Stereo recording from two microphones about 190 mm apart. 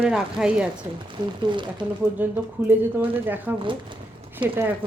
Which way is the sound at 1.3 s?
25° right (ahead or behind).